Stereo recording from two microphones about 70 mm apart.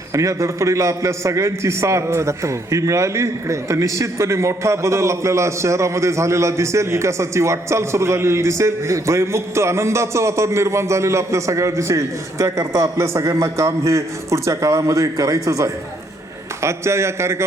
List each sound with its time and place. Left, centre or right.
0.1 s a man's voice: right